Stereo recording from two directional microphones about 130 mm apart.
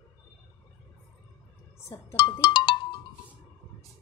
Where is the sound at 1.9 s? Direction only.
40° left (ahead or behind).